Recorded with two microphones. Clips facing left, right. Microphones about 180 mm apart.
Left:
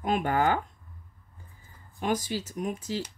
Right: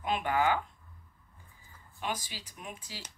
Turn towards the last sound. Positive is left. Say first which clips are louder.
# left 14 dB
turn(degrees=45)  # may be behind; listen again after turning